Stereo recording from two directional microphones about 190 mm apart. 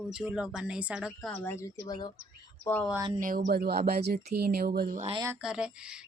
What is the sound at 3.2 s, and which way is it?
Speech, 45° right (ahead or behind).